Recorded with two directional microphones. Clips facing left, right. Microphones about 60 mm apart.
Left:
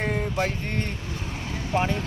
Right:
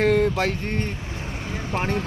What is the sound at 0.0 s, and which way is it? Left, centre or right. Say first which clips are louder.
Music: right 7 dB; right.